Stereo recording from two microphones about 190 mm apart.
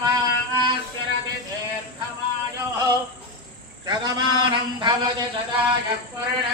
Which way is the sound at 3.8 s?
25° right (ahead or behind).